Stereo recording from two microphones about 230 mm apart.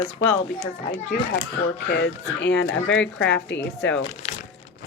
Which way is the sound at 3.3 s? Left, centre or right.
Left.